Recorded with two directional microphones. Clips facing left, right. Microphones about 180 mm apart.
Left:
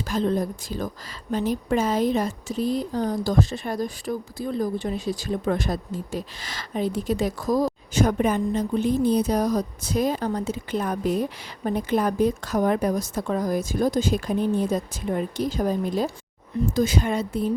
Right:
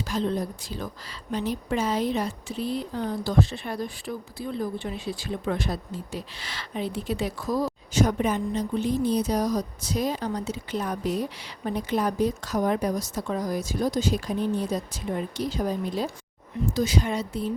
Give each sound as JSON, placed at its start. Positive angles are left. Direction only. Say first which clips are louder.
{"t": 0.0, "sound": "speech", "louder": "left 3 dB", "side_deg": 50}